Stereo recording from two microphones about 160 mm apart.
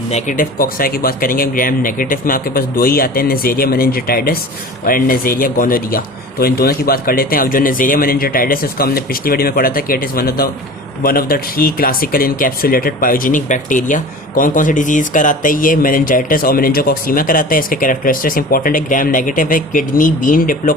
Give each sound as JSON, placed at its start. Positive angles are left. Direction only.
{"t": 0.1, "sound": "speech", "side_deg": 55}